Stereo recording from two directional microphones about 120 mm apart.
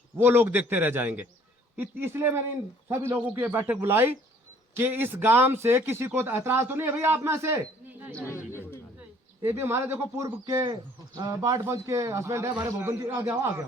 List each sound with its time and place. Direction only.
0.2 s a man's voice: 20° right (ahead or behind)
9.4 s a man's voice: 20° right (ahead or behind)